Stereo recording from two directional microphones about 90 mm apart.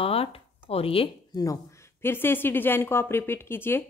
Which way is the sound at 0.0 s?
90° left.